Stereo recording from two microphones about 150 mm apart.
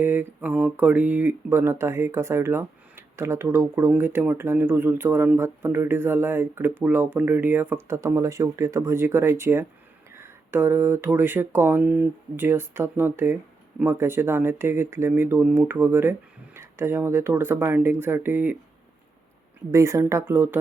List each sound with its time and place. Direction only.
0.0 s speech: 15° right (ahead or behind)
19.7 s speech: 20° right (ahead or behind)